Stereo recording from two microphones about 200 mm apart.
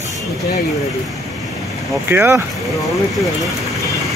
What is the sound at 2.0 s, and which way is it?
Speech, 10° right (ahead or behind).